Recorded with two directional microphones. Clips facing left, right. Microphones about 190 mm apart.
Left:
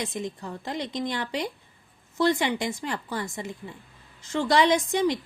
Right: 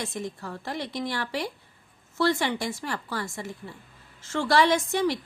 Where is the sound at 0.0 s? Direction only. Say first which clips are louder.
Left 1 dB; 15° left (ahead or behind).